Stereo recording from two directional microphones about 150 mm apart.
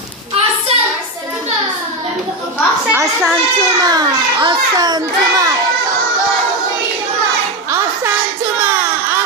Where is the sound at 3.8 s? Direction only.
25° right (ahead or behind).